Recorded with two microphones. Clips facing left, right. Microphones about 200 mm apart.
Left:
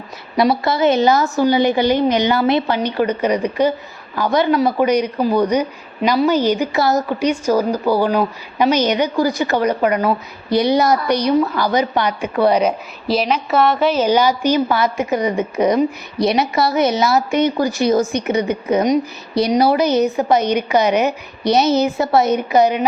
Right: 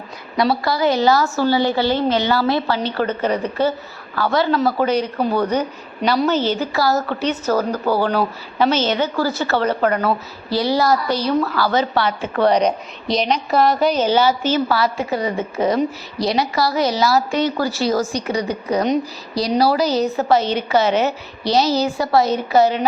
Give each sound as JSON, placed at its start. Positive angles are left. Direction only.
{"t": 0.3, "sound": "a woman's voice", "side_deg": 20}